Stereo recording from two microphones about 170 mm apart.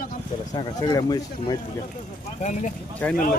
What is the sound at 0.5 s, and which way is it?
Speech, 25° left (ahead or behind).